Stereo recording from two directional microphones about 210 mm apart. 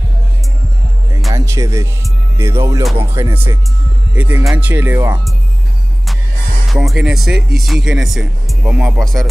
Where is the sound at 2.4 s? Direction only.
10° right (ahead or behind).